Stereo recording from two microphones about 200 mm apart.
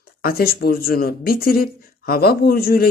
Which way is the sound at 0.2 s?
50° left (ahead or behind).